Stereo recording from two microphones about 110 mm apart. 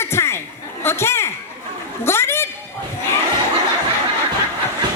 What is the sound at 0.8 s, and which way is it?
Chatter, 25° left (ahead or behind).